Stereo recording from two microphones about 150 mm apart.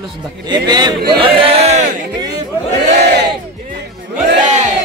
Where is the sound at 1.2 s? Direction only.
40° right (ahead or behind).